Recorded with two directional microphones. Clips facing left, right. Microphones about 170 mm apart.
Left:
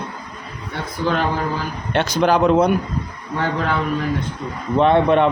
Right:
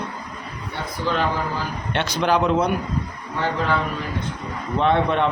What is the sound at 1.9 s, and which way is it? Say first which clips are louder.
Speech: left 4 dB; 40° left (ahead or behind).